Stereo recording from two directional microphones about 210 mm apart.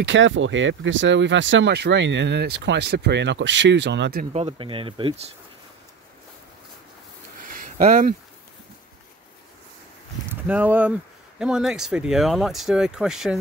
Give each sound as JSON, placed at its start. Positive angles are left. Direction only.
{"t": 0.0, "sound": "speech", "side_deg": -65}
{"t": 4.2, "sound": "speech", "side_deg": -30}
{"t": 7.7, "sound": "speech", "side_deg": -35}
{"t": 10.3, "sound": "speech", "side_deg": -5}